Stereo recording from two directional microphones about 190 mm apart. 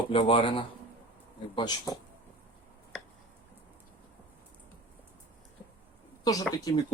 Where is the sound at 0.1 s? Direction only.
30° left (ahead or behind).